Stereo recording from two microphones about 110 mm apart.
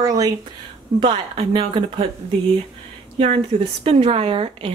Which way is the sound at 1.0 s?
50° right (ahead or behind).